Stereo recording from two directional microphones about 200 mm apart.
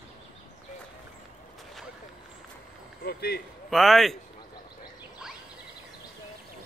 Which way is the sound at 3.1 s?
50° left (ahead or behind).